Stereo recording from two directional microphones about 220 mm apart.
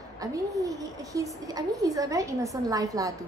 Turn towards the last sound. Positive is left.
turn(degrees=-15)  # may be behind; listen again after turning